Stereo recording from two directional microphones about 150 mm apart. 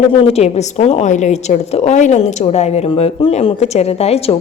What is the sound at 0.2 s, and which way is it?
A woman's voice, 45° left (ahead or behind).